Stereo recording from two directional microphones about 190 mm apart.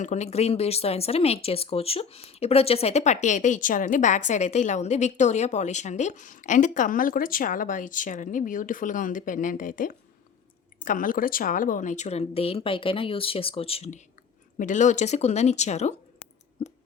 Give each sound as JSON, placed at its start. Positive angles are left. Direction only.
{"t": 0.0, "sound": "speech", "side_deg": 35}